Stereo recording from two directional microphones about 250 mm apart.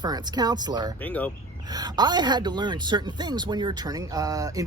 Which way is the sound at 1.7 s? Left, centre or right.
Centre.